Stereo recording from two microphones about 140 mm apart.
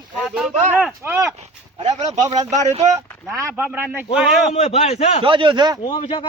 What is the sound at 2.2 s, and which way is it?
Speech, 25° right (ahead or behind).